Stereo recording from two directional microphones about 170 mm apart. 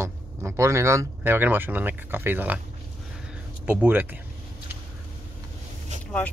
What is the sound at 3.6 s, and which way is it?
Speech, 10° right (ahead or behind).